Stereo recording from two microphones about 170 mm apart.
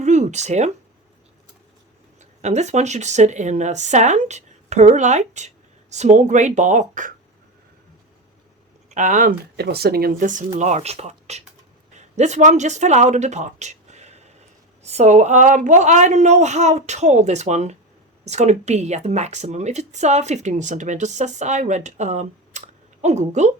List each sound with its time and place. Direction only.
0.0 s a sound: 45° right (ahead or behind)
2.4 s a woman's voice: 45° right (ahead or behind)
8.9 s speech: 45° right (ahead or behind)
9.6 s a woman's voice: 70° right (ahead or behind); by 23.6 s 40° right (ahead or behind)